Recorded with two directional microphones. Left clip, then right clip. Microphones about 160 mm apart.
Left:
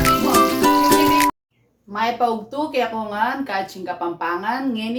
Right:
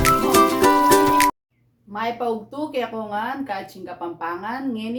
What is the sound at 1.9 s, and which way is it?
A woman's voice, 20° right (ahead or behind).